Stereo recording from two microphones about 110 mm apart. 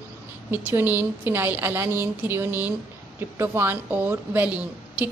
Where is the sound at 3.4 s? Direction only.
20° right (ahead or behind).